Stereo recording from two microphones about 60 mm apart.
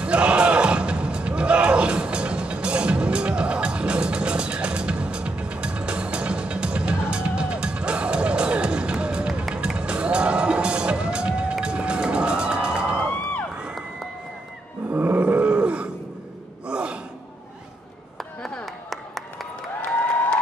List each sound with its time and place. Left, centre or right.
0.0 s music: centre
13.6 s crowd: centre
14.9 s roar: right
16.6 s gasp: centre
18.1 s chop: centre
18.9 s a sound: centre